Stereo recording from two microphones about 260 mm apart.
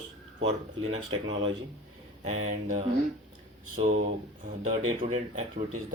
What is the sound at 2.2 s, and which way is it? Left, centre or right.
Speech, right.